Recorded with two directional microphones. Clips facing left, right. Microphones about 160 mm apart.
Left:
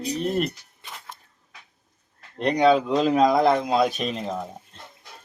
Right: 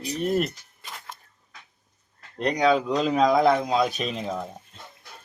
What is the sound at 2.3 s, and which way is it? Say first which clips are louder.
Speech: left 3 dB; centre (ahead or behind).